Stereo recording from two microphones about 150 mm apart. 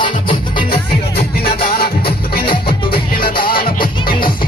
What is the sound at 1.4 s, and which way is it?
Music, 90° left.